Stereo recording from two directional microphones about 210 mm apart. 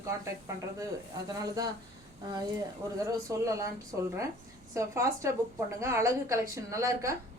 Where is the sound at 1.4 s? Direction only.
15° right (ahead or behind).